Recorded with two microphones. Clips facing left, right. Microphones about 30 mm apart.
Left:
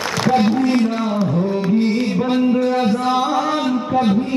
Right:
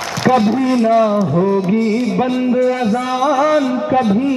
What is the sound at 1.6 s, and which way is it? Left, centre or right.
Music, left.